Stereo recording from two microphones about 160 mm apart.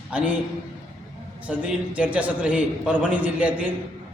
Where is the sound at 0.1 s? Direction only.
5° right (ahead or behind).